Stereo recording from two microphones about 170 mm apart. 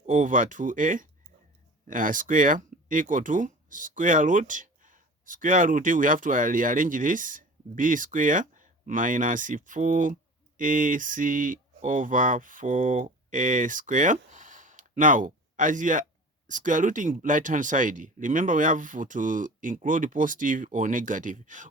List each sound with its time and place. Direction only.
0.0 s speech: 50° right (ahead or behind)